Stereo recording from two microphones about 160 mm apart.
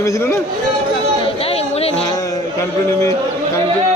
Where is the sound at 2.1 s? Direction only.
20° left (ahead or behind).